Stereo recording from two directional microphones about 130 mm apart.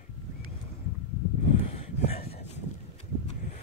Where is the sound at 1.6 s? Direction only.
45° left (ahead or behind).